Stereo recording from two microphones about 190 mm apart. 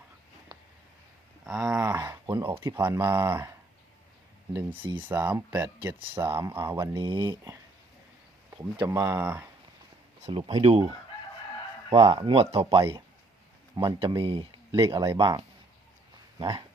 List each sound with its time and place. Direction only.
1.5 s a sound: centre (ahead or behind)
1.8 s speech: 15° right (ahead or behind)
4.9 s speech: 10° right (ahead or behind)
10.2 s speech: 35° right (ahead or behind)
13.7 s speech: 20° right (ahead or behind)
16.4 s speech: 25° right (ahead or behind)